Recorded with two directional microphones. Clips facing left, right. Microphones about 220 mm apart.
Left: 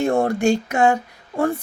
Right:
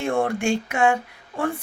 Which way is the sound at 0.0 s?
40° left (ahead or behind).